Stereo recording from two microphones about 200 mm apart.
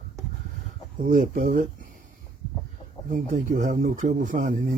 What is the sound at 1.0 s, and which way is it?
Speech, 40° right (ahead or behind).